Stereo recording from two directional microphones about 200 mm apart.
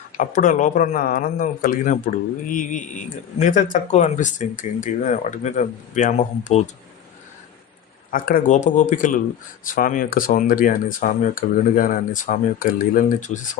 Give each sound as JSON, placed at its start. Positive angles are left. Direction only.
{"t": 0.2, "sound": "speech", "side_deg": 40}
{"t": 8.1, "sound": "speech", "side_deg": 45}